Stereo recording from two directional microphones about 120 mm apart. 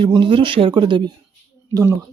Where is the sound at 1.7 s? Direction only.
30° right (ahead or behind).